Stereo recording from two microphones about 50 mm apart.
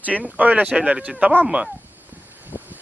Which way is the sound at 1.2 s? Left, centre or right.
Right.